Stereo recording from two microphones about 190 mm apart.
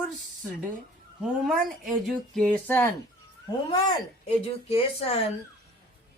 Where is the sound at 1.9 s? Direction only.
Centre (ahead or behind).